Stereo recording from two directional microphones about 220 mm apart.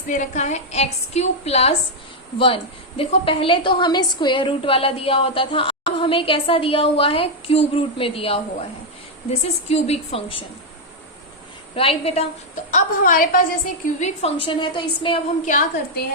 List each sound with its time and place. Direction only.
0.1 s a woman's voice: 35° left (ahead or behind)
3.0 s a woman's voice: 25° left (ahead or behind)
9.4 s a woman's voice: 30° left (ahead or behind)
11.7 s a woman's voice: 25° left (ahead or behind)
12.7 s a woman's voice: 40° left (ahead or behind)
13.8 s a woman's voice: 30° left (ahead or behind)
15.4 s a woman's voice: 35° left (ahead or behind)